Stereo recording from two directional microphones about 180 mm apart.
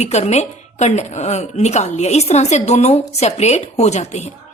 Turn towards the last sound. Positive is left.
turn(degrees=40)  # may be behind; listen again after turning